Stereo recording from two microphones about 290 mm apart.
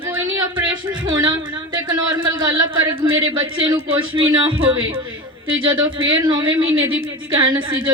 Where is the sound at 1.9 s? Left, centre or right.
Centre.